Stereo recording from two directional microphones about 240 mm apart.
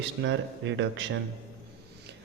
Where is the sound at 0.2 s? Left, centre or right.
Right.